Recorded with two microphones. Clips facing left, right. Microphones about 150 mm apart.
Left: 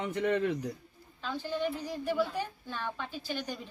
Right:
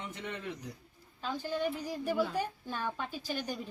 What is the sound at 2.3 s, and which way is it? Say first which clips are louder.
A woman's voice: right 1 dB; 45° right (ahead or behind).